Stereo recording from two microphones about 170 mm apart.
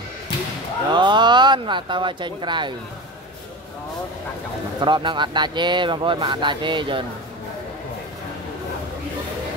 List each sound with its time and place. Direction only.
0.9 s speech: 25° right (ahead or behind)
4.7 s speech: 25° right (ahead or behind)